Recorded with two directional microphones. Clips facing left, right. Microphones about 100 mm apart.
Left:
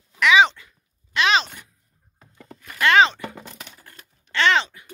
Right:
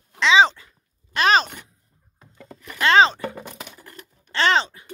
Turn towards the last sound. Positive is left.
turn(degrees=-35)  # may be behind; listen again after turning